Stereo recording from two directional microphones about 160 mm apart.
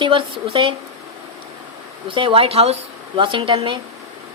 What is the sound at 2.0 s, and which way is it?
A woman's voice, 35° right (ahead or behind).